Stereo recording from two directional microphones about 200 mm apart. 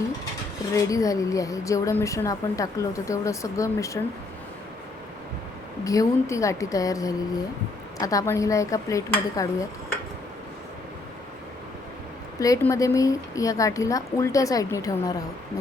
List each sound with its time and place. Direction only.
0.8 s a woman's voice: 15° left (ahead or behind)
5.8 s a woman's voice: 15° left (ahead or behind)
12.4 s a woman's voice: 15° left (ahead or behind)